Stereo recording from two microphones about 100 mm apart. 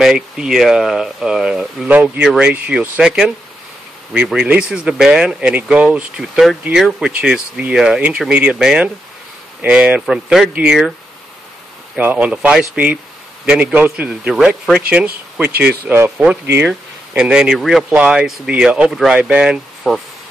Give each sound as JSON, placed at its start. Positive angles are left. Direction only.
{"t": 0.0, "sound": "speech", "side_deg": -5}
{"t": 12.0, "sound": "speech", "side_deg": -15}
{"t": 15.9, "sound": "speech", "side_deg": -25}
{"t": 17.2, "sound": "speech", "side_deg": -5}